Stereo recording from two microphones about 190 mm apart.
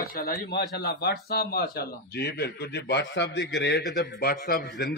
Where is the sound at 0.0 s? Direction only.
50° left (ahead or behind).